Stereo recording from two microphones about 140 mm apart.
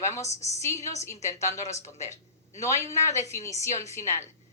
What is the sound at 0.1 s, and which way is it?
Speech, 50° left (ahead or behind).